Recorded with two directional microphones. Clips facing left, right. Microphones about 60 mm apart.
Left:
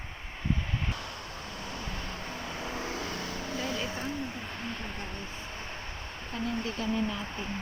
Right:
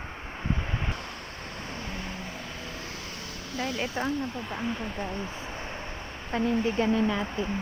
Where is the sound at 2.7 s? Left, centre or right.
Left.